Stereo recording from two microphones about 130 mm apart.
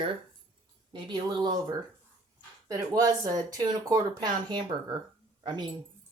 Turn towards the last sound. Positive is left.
turn(degrees=-35)  # may be behind; listen again after turning